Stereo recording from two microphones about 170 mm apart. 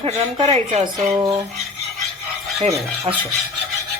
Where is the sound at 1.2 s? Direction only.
20° right (ahead or behind).